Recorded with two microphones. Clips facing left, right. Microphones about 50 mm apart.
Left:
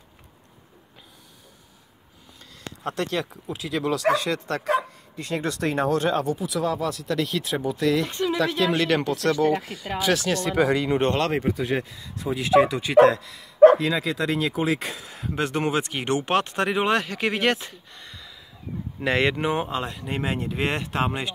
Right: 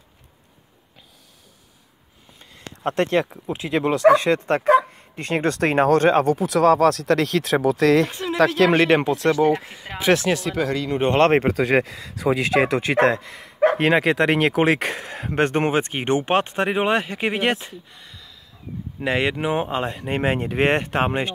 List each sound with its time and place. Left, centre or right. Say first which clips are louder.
2.8 s speech: right 7 dB; right
5.1 s speech: right 5 dB; right
8.1 s a sound: left 2 dB; centre
8.4 s speech: right 8 dB; right
8.7 s speech: right 6 dB; right
9.0 s speech: right 4 dB; right
10.5 s speech: left 2 dB; centre
11.1 s speech: right 8 dB; right
11.4 s speech: right 6 dB; right
13.1 s speech: right 4 dB; right
13.4 s speech: left 6 dB; right; by 18.0 s centre
18.0 s a sound: left 1 dB; centre
18.9 s speech: even; centre
19.7 s speech: right 4 dB; right